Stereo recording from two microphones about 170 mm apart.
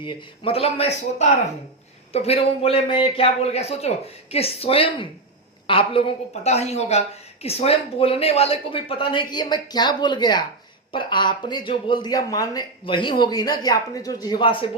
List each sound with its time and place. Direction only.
0.0 s speech: 30° left (ahead or behind)